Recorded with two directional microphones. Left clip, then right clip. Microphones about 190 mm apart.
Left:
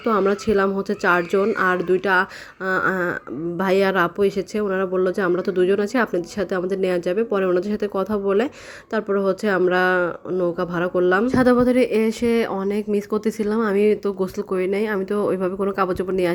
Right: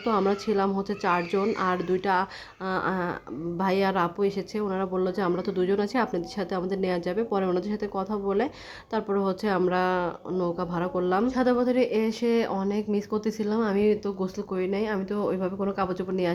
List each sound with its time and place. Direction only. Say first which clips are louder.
0.0 s speech: left 6 dB; 15° left (ahead or behind)
11.3 s speech: left 7 dB; 30° left (ahead or behind)